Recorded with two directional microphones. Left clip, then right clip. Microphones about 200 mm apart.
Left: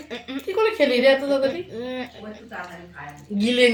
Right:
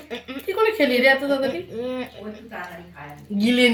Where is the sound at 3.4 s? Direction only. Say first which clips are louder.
Even; 15° right (ahead or behind).